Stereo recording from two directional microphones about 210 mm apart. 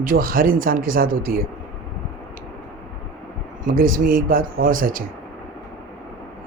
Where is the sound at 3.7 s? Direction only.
40° right (ahead or behind).